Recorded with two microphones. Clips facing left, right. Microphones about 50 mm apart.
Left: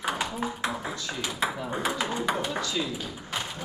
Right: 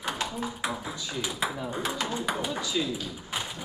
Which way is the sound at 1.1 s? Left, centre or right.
Left.